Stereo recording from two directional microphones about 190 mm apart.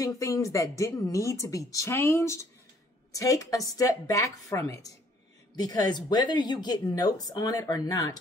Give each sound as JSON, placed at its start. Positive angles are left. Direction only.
{"t": 0.0, "sound": "speech", "side_deg": 15}